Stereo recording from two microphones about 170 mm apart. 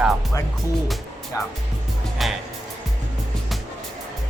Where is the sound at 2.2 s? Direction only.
Centre (ahead or behind).